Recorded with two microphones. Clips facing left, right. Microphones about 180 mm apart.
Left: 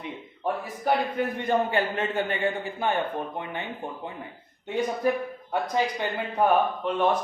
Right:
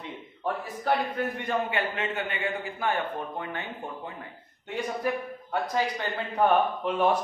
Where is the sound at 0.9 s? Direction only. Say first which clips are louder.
Left 2 dB; 15° left (ahead or behind).